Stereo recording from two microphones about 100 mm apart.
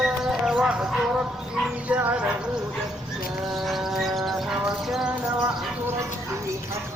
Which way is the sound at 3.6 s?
Centre (ahead or behind).